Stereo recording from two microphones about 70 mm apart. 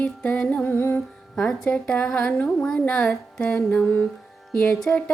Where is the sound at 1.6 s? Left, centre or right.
Centre.